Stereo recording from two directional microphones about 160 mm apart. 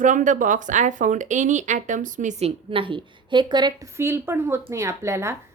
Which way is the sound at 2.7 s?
30° right (ahead or behind).